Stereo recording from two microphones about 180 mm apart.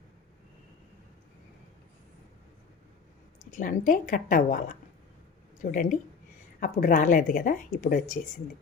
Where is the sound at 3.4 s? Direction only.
50° left (ahead or behind).